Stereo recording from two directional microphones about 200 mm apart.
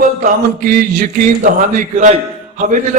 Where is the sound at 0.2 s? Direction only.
45° right (ahead or behind).